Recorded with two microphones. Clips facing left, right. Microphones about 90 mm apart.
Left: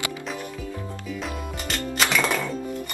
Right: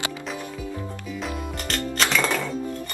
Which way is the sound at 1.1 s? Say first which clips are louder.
Right 1 dB; centre (ahead or behind).